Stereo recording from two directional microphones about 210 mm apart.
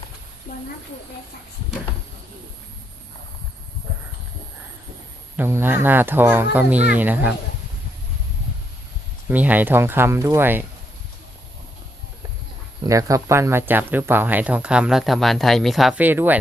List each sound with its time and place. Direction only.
0.5 s speech: 35° left (ahead or behind)
5.4 s speech: 10° right (ahead or behind)
9.3 s speech: 10° right (ahead or behind)
12.8 s speech: 15° right (ahead or behind)